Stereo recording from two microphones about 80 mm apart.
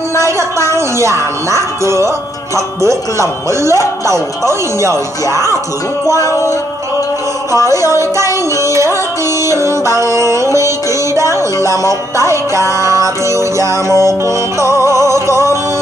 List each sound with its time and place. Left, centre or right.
0.4 s speech: right
4.0 s music: right
7.6 s music: right